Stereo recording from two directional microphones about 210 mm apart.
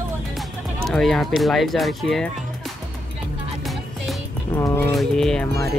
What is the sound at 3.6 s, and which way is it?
Music, centre (ahead or behind).